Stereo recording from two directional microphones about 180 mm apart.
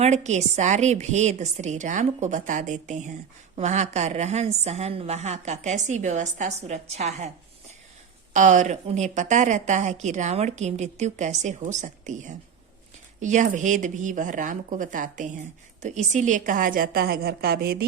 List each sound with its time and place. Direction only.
0.0 s a woman's voice: 40° right (ahead or behind)
8.3 s a woman's voice: 45° right (ahead or behind); by 17.8 s 60° right (ahead or behind)